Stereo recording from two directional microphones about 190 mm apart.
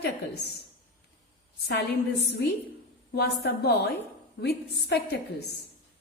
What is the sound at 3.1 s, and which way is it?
A woman's voice, 60° left (ahead or behind).